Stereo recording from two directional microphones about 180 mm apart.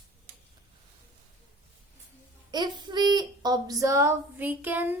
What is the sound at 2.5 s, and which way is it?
A child's voice, 25° right (ahead or behind).